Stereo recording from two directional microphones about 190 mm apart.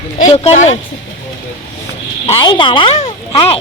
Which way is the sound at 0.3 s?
35° left (ahead or behind).